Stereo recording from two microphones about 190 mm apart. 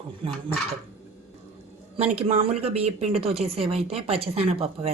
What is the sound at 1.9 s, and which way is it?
Speech, 30° right (ahead or behind).